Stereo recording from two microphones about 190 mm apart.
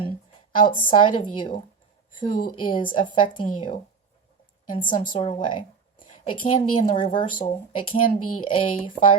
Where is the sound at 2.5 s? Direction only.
25° left (ahead or behind).